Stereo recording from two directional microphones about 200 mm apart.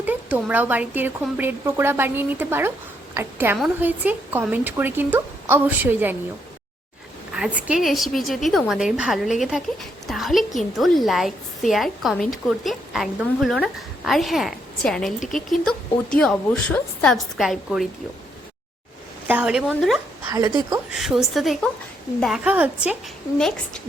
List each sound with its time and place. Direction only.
0.0 s a woman's voice: 10° right (ahead or behind)
7.3 s a woman's voice: 5° right (ahead or behind)
19.3 s a woman's voice: 5° right (ahead or behind)
20.3 s a woman's voice: 20° right (ahead or behind)
20.9 s a woman's voice: centre (ahead or behind)
23.4 s a woman's voice: 5° left (ahead or behind)